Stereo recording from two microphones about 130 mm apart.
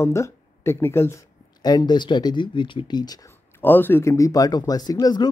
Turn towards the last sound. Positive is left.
turn(degrees=30)  # may be behind; listen again after turning